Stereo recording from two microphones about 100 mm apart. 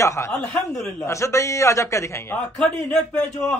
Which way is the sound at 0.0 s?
30° left (ahead or behind).